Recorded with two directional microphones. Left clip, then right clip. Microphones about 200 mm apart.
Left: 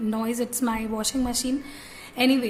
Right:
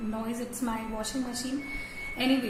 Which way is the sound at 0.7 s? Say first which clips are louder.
Left 6 dB; 55° left (ahead or behind).